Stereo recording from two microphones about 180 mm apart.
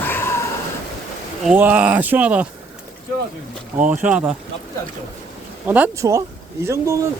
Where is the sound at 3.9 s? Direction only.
5° right (ahead or behind).